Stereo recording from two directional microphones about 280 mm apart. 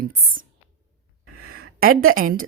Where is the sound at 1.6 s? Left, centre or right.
Right.